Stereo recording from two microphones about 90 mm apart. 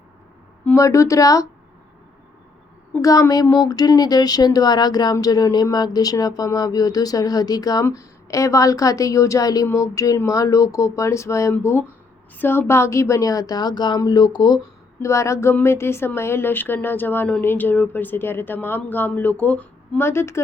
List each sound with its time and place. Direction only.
0.8 s a woman's voice: 35° left (ahead or behind)
3.0 s a woman's voice: 40° left (ahead or behind)
15.0 s a woman's voice: 35° left (ahead or behind); by 20.0 s 15° left (ahead or behind)
20.0 s speech: 30° left (ahead or behind)